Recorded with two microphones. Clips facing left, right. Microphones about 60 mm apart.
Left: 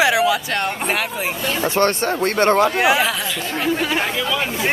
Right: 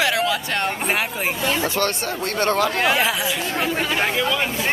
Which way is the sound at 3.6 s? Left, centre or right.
Centre.